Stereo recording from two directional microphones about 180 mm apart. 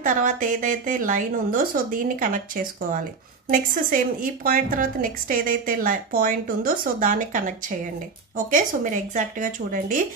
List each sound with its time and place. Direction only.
0.0 s a woman's voice: 45° right (ahead or behind)